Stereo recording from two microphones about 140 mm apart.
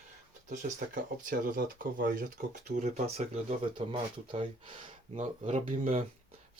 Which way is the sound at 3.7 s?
40° right (ahead or behind).